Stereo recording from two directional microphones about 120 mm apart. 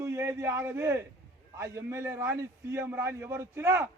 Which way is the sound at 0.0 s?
25° right (ahead or behind).